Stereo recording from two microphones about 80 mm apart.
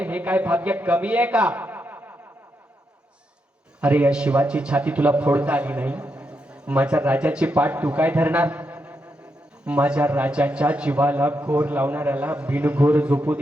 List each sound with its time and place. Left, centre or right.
0.0 s a man's voice: centre
3.8 s a man's voice: centre